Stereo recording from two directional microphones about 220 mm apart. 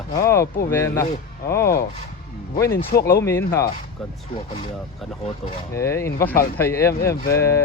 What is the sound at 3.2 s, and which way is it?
Speech, 10° left (ahead or behind).